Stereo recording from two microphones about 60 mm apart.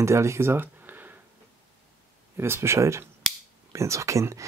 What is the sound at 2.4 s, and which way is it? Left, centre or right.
Speech, right.